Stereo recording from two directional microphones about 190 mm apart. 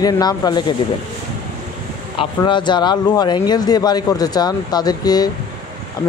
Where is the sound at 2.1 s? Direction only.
25° left (ahead or behind).